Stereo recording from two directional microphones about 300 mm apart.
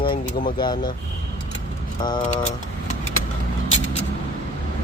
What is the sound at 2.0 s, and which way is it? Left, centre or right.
Speech, centre.